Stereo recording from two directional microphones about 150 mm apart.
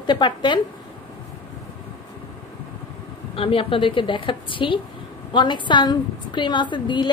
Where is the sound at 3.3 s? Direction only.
35° left (ahead or behind).